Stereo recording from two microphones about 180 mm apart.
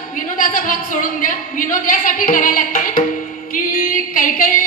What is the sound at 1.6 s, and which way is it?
Speech, 45° left (ahead or behind).